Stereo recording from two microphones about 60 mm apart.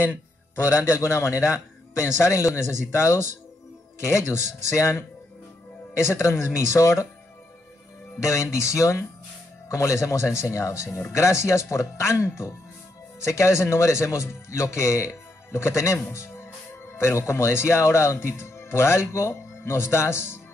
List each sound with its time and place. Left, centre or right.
0.0 s a sound: right
0.7 s speech: left
8.2 s speech: left